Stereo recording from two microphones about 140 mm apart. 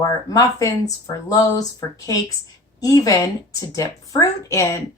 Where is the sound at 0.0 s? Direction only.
25° left (ahead or behind).